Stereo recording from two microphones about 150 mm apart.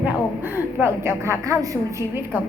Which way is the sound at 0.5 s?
15° right (ahead or behind).